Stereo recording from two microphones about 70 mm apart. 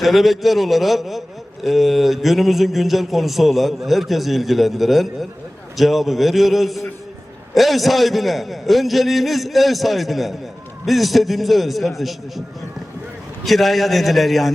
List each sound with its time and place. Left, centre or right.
0.0 s a man's voice: centre
13.4 s a man's voice: centre